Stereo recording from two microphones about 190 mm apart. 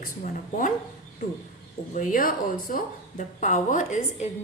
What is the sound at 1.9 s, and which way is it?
A woman's voice, 45° left (ahead or behind).